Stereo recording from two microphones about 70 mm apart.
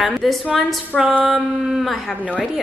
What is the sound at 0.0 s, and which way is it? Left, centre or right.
A woman's voice, centre.